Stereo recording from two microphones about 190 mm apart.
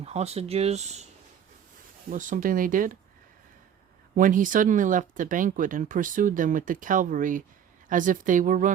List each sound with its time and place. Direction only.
0.0 s speech: 35° right (ahead or behind)
2.0 s speech: 45° right (ahead or behind)
4.1 s speech: 45° right (ahead or behind)